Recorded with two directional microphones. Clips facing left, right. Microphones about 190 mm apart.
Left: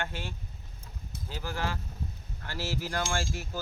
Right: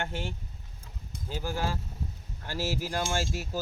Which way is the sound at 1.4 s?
10° right (ahead or behind).